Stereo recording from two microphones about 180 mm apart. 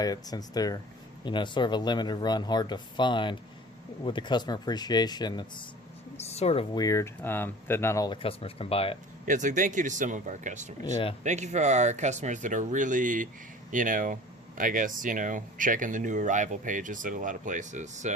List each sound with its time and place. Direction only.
0.0 s speech: 20° left (ahead or behind)
6.2 s speech: 35° left (ahead or behind)
6.7 s speech: 20° left (ahead or behind)
9.2 s speech: 45° right (ahead or behind)